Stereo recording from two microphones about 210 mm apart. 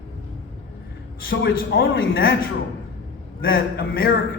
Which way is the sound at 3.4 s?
45° left (ahead or behind).